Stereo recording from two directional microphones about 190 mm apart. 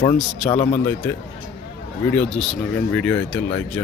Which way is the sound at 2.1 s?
5° left (ahead or behind).